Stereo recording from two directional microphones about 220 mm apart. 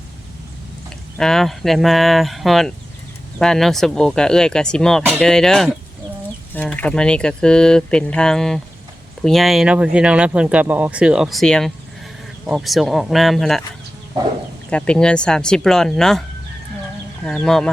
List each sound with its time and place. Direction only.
1.2 s speech: centre (ahead or behind)
14.7 s speech: 5° left (ahead or behind)
17.2 s speech: centre (ahead or behind)